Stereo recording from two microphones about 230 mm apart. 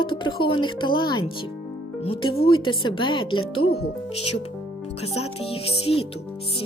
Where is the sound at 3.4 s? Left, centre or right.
Left.